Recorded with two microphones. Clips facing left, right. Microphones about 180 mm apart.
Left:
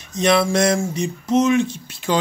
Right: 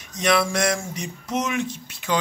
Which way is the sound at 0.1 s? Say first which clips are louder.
Left 4 dB; 25° left (ahead or behind).